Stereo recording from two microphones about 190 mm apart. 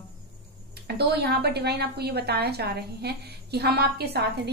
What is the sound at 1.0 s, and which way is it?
A woman's voice, 60° right (ahead or behind).